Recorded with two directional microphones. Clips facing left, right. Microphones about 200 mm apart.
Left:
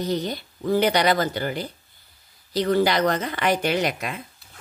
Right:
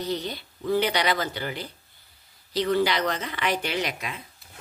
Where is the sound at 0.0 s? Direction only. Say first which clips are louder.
Left 4 dB; 45° left (ahead or behind).